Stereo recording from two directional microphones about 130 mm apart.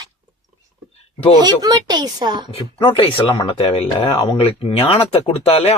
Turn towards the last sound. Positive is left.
turn(degrees=50)  # may be behind; listen again after turning